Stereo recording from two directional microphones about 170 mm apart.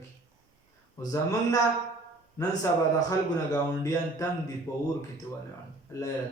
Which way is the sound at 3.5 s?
20° left (ahead or behind).